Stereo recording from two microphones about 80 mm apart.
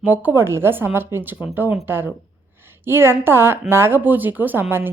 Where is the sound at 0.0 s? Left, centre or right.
Right.